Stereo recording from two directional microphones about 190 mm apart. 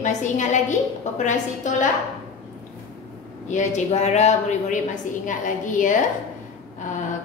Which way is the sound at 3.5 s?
40° left (ahead or behind).